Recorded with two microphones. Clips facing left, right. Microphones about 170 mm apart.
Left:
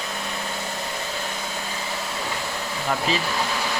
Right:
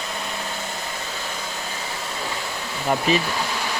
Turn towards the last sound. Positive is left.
turn(degrees=-15)  # may be behind; listen again after turning